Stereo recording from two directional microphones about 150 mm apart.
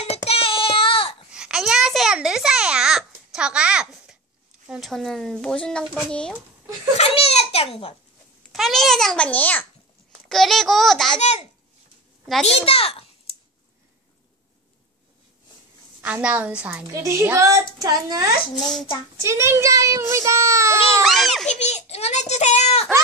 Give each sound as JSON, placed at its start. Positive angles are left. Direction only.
{"t": 0.0, "sound": "child singing", "side_deg": 40}
{"t": 1.3, "sound": "babbling", "side_deg": -5}
{"t": 4.6, "sound": "speech", "side_deg": 0}
{"t": 7.0, "sound": "a sound", "side_deg": 45}
{"t": 8.5, "sound": "speech", "side_deg": 0}
{"t": 11.1, "sound": "a child's voice", "side_deg": 50}
{"t": 12.4, "sound": "a child's voice", "side_deg": 40}
{"t": 16.0, "sound": "a woman's voice", "side_deg": -10}
{"t": 21.0, "sound": "a sound", "side_deg": 0}
{"t": 21.5, "sound": "a child's voice", "side_deg": 50}